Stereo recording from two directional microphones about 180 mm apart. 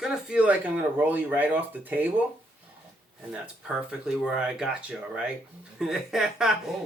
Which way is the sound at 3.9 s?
5° right (ahead or behind).